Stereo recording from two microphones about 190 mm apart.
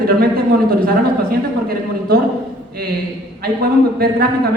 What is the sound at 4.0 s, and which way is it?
Speech, 55° right (ahead or behind).